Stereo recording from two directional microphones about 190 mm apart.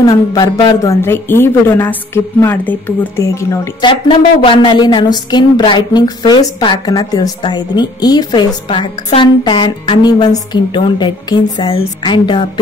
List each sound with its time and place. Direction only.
0.0 s speech: 20° left (ahead or behind)
3.9 s a woman's voice: 25° left (ahead or behind)